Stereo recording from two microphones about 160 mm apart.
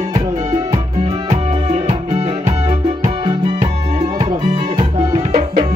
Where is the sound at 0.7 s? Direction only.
40° right (ahead or behind).